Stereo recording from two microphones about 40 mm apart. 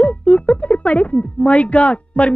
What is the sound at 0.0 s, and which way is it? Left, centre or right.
Speech, left.